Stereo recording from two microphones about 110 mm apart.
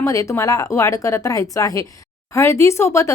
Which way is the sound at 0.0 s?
30° left (ahead or behind).